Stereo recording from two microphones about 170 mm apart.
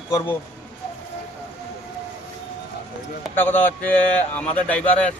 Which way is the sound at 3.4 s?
10° left (ahead or behind).